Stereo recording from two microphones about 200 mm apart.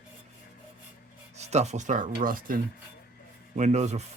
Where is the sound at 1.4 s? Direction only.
35° right (ahead or behind).